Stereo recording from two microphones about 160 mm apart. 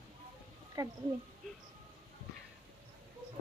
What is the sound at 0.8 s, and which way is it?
Speech, 20° right (ahead or behind).